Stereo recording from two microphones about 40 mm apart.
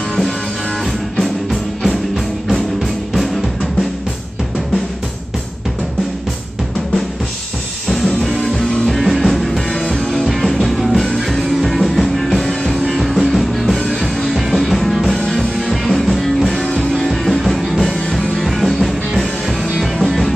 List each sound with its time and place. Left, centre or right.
1.1 s music: centre
8.0 s music: centre
9.8 s music: centre
10.2 s music: centre
16.6 s music: left
17.1 s music: centre